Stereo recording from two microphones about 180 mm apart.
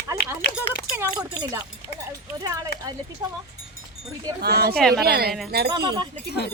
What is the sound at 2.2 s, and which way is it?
Speech, 20° right (ahead or behind).